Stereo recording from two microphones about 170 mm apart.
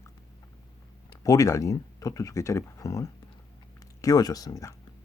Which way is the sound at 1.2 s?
20° left (ahead or behind).